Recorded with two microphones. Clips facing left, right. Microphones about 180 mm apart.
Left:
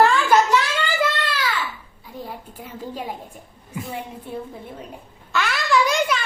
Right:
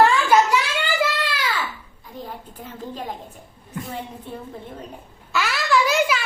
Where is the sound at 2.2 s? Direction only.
10° left (ahead or behind).